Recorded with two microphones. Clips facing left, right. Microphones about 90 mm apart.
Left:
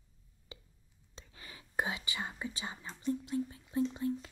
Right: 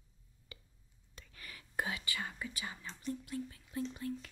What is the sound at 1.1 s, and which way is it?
Speech, 25° left (ahead or behind).